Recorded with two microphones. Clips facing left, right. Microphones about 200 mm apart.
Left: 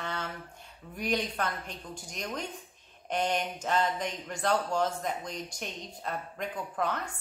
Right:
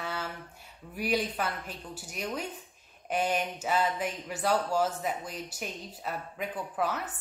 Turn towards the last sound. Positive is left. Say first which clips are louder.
# right 1 dB
turn(degrees=-5)  # may be behind; listen again after turning